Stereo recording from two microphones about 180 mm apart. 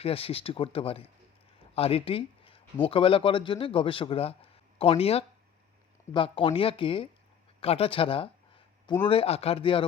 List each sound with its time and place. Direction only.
0.0 s speech: 30° left (ahead or behind)
7.6 s a sound: 35° left (ahead or behind)
9.0 s speech: 35° left (ahead or behind)